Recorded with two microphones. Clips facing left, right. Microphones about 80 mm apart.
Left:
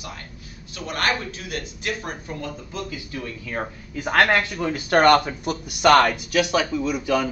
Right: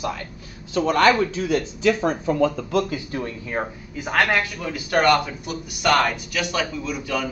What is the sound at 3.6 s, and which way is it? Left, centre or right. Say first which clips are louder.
Speech: right 3 dB; right.